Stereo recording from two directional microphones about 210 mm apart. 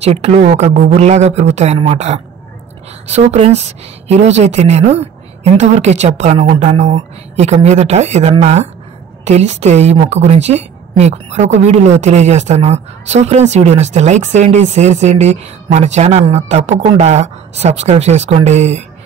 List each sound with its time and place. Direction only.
0.0 s a woman's voice: 30° right (ahead or behind)